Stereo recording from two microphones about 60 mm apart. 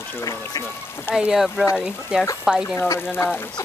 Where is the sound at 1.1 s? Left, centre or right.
Centre.